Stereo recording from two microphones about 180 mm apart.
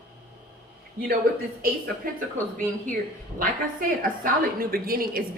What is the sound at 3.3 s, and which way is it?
A woman's voice, 50° right (ahead or behind).